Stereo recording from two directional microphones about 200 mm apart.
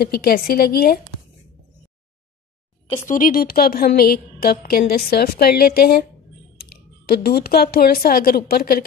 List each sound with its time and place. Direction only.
0.0 s speech: 50° left (ahead or behind)
3.1 s speech: 45° left (ahead or behind)